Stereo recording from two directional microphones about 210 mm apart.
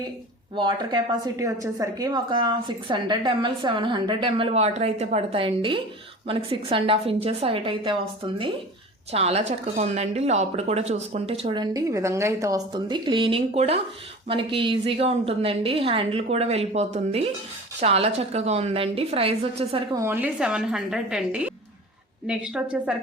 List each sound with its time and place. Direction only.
0.5 s a woman's voice: 20° right (ahead or behind)
9.1 s a woman's voice: 30° right (ahead or behind)
20.0 s a woman's voice: 10° right (ahead or behind)